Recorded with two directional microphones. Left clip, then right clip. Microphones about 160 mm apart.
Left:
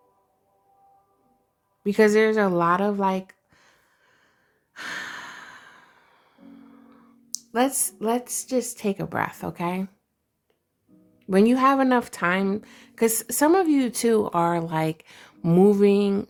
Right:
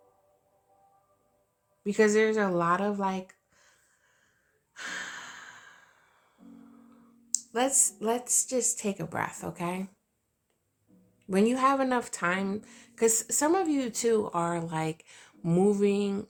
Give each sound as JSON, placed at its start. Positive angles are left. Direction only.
{"t": 1.8, "sound": "a sound", "side_deg": 40}
{"t": 4.7, "sound": "music", "side_deg": 40}
{"t": 11.3, "sound": "speech", "side_deg": 35}